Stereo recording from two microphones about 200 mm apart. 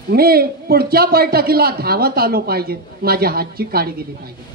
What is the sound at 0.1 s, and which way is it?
A man's voice, 50° right (ahead or behind).